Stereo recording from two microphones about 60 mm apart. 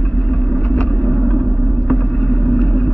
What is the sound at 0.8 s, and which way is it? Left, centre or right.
Vehicle, centre.